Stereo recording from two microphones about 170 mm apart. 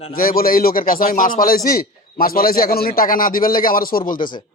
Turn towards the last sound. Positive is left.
turn(degrees=55)  # may be behind; listen again after turning